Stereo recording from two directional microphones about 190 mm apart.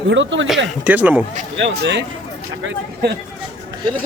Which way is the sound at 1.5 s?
65° right (ahead or behind).